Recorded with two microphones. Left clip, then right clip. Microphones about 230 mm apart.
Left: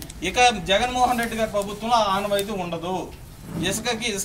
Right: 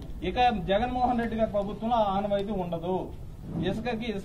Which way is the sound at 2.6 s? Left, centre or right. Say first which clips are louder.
Left 3 dB; left.